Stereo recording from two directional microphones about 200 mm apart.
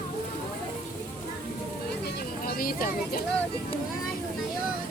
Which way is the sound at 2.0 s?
50° left (ahead or behind).